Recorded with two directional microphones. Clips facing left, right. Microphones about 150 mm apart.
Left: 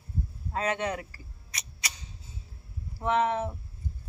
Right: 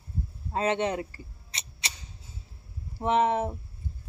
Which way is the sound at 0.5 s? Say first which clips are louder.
Right 3 dB; 25° right (ahead or behind).